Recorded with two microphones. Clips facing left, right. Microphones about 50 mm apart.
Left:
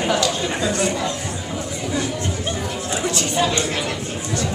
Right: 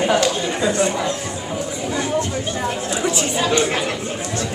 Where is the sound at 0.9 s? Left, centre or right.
Centre.